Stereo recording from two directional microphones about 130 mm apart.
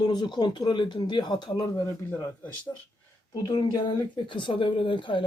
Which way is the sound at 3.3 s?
35° left (ahead or behind).